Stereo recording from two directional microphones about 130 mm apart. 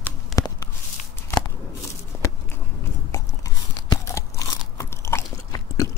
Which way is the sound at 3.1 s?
25° left (ahead or behind).